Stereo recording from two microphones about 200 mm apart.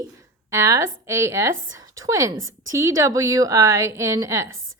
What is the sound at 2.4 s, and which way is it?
Speech, 80° right.